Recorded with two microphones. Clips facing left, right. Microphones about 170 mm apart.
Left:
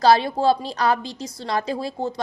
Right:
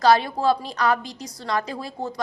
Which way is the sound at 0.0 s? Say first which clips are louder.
Left 2 dB; 30° left (ahead or behind).